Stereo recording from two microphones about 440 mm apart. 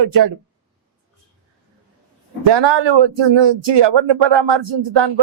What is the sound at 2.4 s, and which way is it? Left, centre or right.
A man's voice, right.